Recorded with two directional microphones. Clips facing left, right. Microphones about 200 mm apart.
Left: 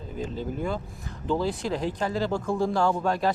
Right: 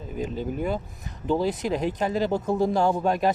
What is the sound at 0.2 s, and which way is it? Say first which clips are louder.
Speech: right 2 dB; 15° right (ahead or behind).